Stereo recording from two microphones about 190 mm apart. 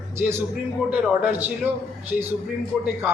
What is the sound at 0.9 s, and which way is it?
Speech, 10° right (ahead or behind).